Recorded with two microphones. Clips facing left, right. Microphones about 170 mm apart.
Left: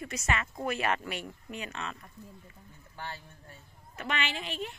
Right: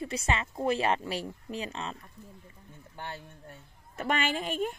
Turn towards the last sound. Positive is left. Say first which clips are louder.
# right 6 dB
turn(degrees=-45)  # may be behind; listen again after turning